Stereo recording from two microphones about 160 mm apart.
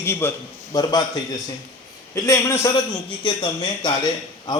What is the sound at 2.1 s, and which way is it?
Speech, 15° left (ahead or behind).